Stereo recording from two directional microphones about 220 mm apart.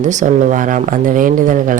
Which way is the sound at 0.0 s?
35° right (ahead or behind).